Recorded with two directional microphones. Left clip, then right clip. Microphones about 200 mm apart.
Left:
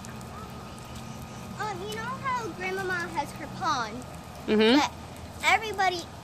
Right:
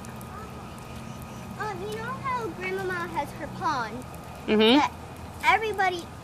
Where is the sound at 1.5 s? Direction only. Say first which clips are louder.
Right 1 dB; 40° left (ahead or behind).